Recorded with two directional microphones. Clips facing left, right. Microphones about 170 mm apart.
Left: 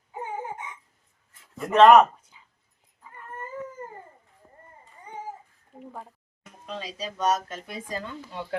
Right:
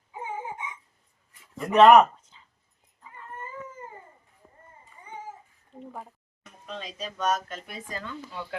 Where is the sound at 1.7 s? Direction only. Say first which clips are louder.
Left 1 dB; 10° right (ahead or behind).